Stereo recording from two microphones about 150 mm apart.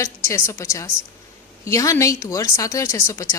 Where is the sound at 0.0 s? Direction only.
20° left (ahead or behind).